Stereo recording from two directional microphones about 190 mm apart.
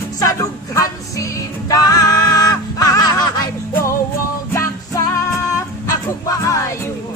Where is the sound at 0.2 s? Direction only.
15° left (ahead or behind).